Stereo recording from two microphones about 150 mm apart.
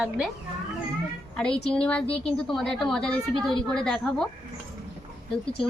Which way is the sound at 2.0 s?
40° left (ahead or behind).